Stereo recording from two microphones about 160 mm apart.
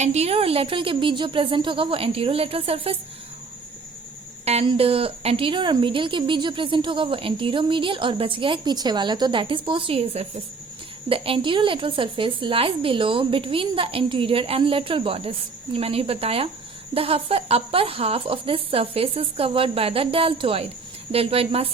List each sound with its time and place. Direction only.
0.0 s a woman's voice: 45° right (ahead or behind)
4.4 s a woman's voice: 40° right (ahead or behind)